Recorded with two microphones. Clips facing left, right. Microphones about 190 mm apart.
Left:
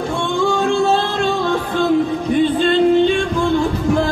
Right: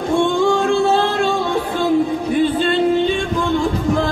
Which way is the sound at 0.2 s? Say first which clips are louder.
Right 1 dB; 15° right (ahead or behind).